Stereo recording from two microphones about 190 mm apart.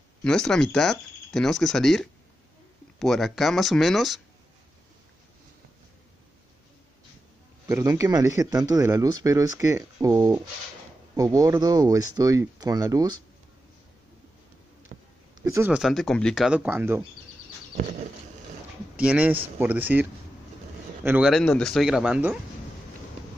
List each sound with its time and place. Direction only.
0.2 s speech: 5° left (ahead or behind)
7.6 s speech: 15° right (ahead or behind)
14.9 s a sound: 45° right (ahead or behind)
15.4 s speech: 15° right (ahead or behind)
18.9 s speech: 5° right (ahead or behind)
21.3 s speech: 5° left (ahead or behind)